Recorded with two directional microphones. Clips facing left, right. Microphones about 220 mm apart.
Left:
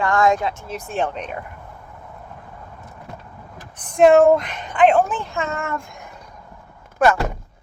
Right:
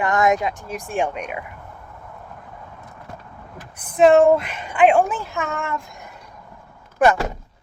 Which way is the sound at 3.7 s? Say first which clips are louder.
Left 1 dB; 5° right (ahead or behind).